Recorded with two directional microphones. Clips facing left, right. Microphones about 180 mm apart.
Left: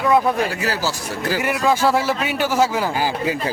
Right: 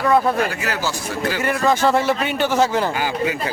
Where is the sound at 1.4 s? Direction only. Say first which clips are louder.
Even; 10° left (ahead or behind).